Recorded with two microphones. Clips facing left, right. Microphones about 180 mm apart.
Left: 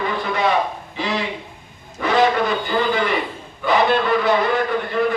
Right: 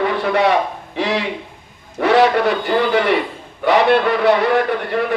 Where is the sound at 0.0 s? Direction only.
65° right (ahead or behind).